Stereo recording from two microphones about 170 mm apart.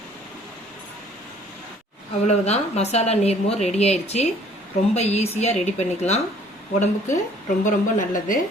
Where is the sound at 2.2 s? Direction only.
40° left (ahead or behind).